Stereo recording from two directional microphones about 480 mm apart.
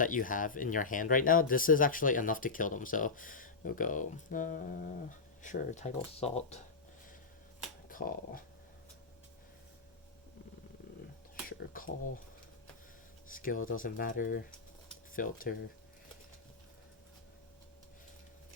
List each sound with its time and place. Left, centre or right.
0.0 s speech: centre
7.9 s speech: centre
11.4 s a sound: centre
13.3 s speech: centre